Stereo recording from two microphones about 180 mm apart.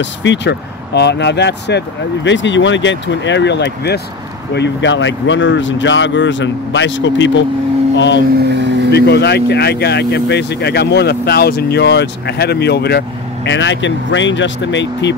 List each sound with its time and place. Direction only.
0.0 s speech: 85° left; by 4.0 s 70° left (ahead or behind)
4.6 s speech: 80° left
8.5 s speech: 75° right (ahead or behind)
8.9 s speech: 70° left (ahead or behind); by 15.1 s 85° left